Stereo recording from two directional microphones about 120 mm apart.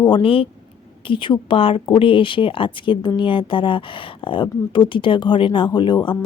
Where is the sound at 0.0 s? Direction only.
45° left (ahead or behind).